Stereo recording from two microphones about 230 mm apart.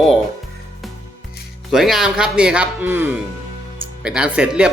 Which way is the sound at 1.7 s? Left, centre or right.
Centre.